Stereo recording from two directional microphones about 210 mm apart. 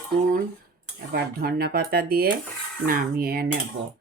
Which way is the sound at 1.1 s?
45° right (ahead or behind).